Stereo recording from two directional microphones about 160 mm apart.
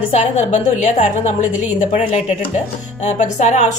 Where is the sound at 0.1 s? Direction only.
45° left (ahead or behind).